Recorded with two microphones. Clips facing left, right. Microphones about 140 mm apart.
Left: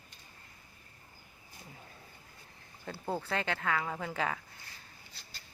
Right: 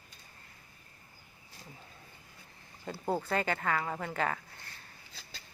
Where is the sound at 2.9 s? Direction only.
5° right (ahead or behind).